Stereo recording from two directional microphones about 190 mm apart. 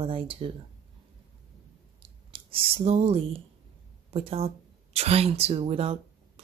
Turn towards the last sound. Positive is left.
turn(degrees=-30)  # may be behind; listen again after turning